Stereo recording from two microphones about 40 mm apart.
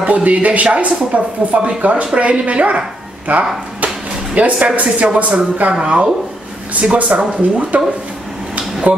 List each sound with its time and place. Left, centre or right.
0.0 s speech: right